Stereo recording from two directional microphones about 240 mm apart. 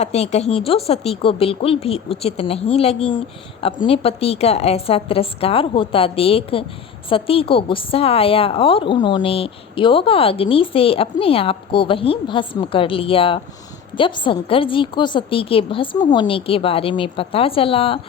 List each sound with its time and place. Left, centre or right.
0.0 s speech: left